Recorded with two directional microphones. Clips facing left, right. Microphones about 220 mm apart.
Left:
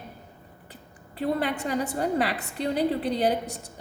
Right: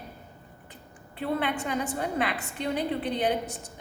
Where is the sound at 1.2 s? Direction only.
40° left (ahead or behind).